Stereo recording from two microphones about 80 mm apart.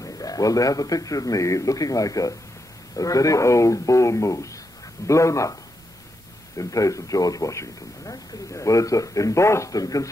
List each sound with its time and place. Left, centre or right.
0.0 s a man's voice: left